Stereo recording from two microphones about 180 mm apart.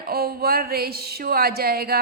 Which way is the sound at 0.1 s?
60° right (ahead or behind).